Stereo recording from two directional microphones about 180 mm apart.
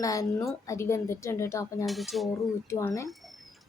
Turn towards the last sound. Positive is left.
turn(degrees=0)  # may be behind; listen again after turning